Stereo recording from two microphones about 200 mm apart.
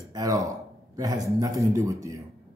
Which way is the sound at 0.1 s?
15° right (ahead or behind).